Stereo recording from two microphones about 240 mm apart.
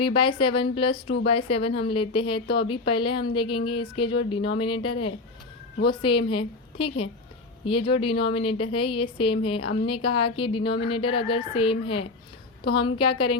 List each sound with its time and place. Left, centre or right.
0.0 s a woman's voice: left